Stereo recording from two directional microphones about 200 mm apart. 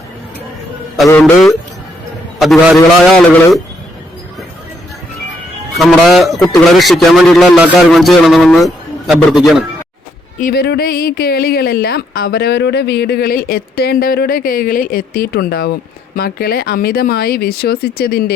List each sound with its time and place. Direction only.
1.2 s a man's voice: centre (ahead or behind)
5.7 s a man's voice: centre (ahead or behind)
10.4 s speech: 50° left (ahead or behind)